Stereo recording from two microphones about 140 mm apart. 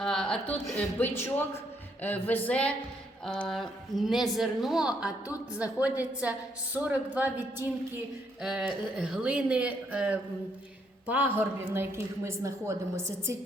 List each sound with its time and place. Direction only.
0.0 s a woman's voice: 5° left (ahead or behind); by 8.0 s 15° right (ahead or behind)
8.4 s speech: 5° right (ahead or behind)